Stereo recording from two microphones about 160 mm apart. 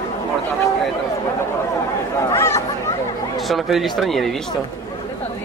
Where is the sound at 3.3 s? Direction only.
Centre (ahead or behind).